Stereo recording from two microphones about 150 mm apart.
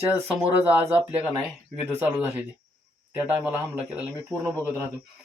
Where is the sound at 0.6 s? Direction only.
15° right (ahead or behind).